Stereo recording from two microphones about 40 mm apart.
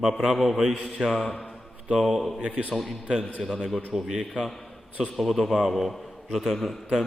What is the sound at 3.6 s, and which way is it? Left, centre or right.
Speech, centre.